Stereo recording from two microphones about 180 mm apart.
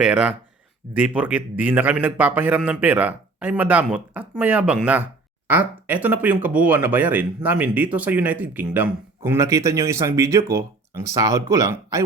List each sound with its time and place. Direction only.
0.0 s speech: 5° right (ahead or behind)